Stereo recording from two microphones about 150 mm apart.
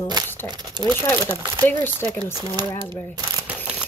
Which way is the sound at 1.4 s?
25° right (ahead or behind).